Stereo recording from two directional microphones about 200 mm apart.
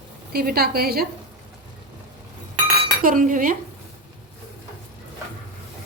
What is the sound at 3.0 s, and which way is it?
Speech, 45° right (ahead or behind).